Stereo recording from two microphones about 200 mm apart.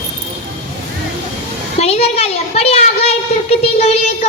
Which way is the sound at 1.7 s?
30° left (ahead or behind).